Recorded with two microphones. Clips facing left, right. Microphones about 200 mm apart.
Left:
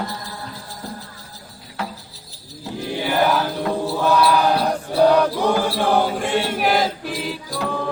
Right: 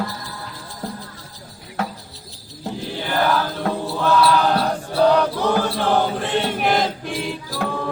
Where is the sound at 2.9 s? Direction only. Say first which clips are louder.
Left 2 dB; 15° left (ahead or behind).